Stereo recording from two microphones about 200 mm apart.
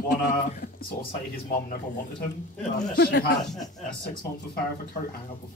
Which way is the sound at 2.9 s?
50° left (ahead or behind).